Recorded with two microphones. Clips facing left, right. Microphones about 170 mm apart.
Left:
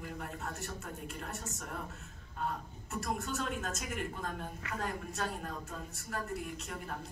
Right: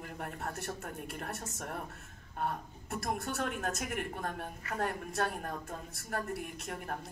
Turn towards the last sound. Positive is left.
turn(degrees=-55)  # may be behind; listen again after turning